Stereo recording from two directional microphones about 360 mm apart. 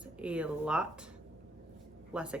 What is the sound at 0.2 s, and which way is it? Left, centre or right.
Speech, centre.